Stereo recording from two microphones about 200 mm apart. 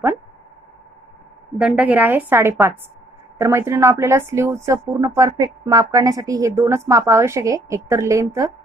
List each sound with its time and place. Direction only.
1.6 s a woman's voice: 5° right (ahead or behind)